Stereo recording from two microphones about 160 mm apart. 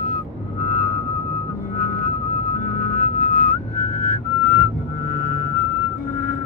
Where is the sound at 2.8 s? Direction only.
55° left (ahead or behind).